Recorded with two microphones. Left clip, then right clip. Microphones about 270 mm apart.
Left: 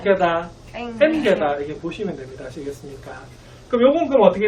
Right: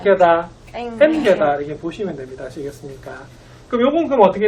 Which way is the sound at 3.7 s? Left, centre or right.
Centre.